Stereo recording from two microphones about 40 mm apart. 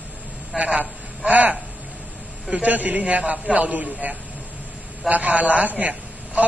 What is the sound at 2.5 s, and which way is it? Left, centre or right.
A man's voice, right.